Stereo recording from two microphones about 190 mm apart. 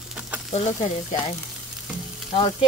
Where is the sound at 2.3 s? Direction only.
30° left (ahead or behind).